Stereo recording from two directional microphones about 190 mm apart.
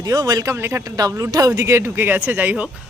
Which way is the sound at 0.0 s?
20° right (ahead or behind).